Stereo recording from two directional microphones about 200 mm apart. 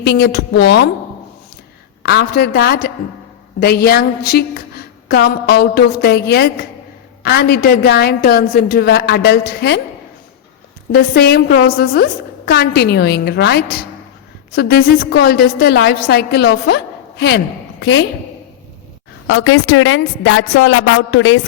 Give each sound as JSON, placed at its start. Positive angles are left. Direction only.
{"t": 0.0, "sound": "a woman's voice", "side_deg": 55}
{"t": 2.0, "sound": "a woman's voice", "side_deg": 55}
{"t": 10.9, "sound": "a woman's voice", "side_deg": 55}
{"t": 19.3, "sound": "a woman's voice", "side_deg": 90}